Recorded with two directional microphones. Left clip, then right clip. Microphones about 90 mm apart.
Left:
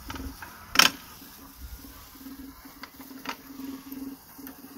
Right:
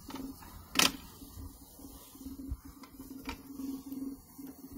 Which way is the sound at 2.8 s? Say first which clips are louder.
Left 7 dB; 30° left (ahead or behind).